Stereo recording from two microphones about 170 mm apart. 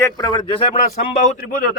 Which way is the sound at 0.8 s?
45° left (ahead or behind).